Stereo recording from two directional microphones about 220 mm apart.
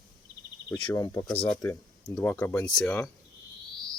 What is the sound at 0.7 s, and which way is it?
Speech, 15° left (ahead or behind).